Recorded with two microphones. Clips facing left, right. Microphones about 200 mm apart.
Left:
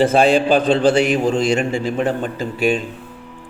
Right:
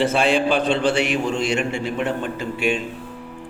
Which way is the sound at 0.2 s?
40° left (ahead or behind).